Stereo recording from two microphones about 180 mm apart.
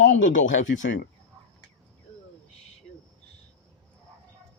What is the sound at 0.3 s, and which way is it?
Speech, 90° left.